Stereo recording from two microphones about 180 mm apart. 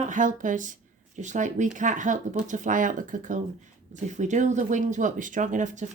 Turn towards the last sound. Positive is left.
turn(degrees=-45)  # may be behind; listen again after turning